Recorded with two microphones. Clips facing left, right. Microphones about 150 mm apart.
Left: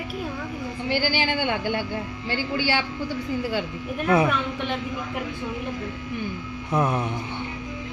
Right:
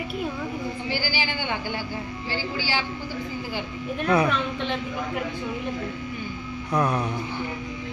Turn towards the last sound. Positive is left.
turn(degrees=20)  # may be behind; listen again after turning